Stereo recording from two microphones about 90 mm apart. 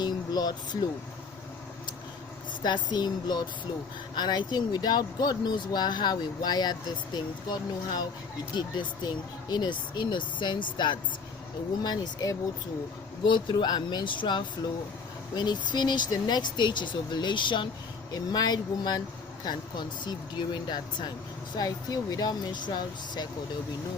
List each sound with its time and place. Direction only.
0.0 s vehicle: 50° left (ahead or behind)
2.6 s speech: 55° left (ahead or behind)
15.7 s speech: 55° left (ahead or behind)
18.1 s speech: 50° left (ahead or behind)